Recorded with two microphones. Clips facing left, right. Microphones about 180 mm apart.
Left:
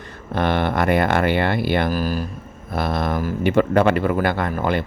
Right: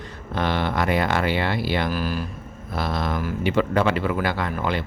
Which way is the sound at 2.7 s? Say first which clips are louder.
Left 4 dB; 55° left (ahead or behind).